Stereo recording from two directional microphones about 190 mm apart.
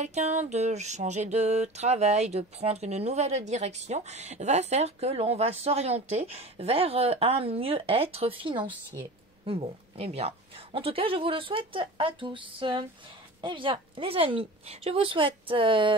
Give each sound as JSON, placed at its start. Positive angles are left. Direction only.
{"t": 0.0, "sound": "music", "side_deg": -35}
{"t": 9.5, "sound": "speech", "side_deg": -30}